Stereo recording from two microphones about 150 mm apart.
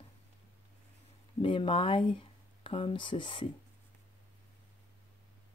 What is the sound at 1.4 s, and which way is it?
Speech, 35° left (ahead or behind).